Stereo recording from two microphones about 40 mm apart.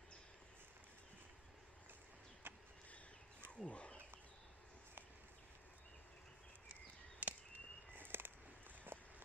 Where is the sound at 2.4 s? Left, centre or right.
Right.